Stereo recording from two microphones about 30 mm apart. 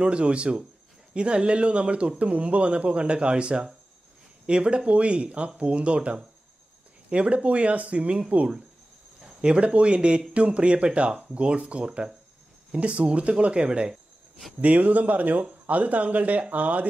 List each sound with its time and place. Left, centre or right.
0.0 s a man's voice: right
9.4 s a man's voice: right
14.6 s speech: right
15.6 s speech: right